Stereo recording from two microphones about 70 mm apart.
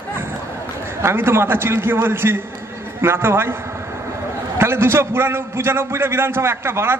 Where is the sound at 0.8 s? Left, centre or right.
Right.